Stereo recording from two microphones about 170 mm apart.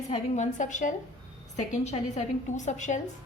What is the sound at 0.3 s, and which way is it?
A woman's voice, 45° left (ahead or behind).